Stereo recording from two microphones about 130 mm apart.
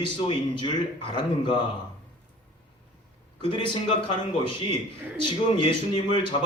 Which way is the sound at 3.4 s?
40° left (ahead or behind).